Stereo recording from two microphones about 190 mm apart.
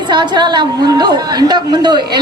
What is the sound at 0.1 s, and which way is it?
A woman's voice, 25° right (ahead or behind).